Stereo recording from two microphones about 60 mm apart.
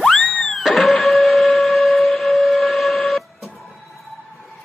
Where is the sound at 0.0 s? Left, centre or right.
Centre.